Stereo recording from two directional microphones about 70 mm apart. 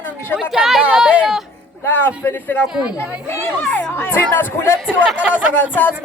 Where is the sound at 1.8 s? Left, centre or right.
Left.